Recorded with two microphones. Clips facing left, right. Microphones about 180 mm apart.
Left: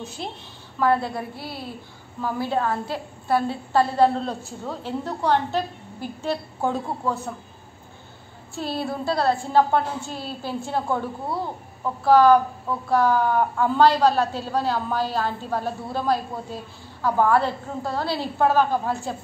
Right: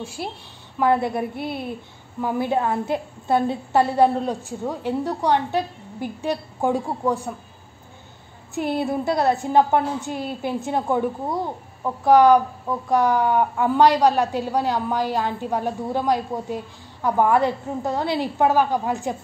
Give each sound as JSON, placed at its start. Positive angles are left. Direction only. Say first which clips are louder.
{"t": 0.0, "sound": "a woman's voice", "louder": "right 2 dB", "side_deg": -10}
{"t": 8.5, "sound": "a woman's voice", "louder": "right 5 dB", "side_deg": -20}